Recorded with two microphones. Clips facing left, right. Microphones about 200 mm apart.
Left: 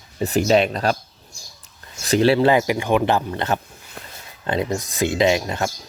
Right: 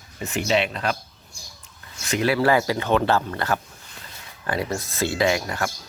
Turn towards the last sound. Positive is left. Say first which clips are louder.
# left 4 dB
turn(degrees=20)  # may be behind; listen again after turning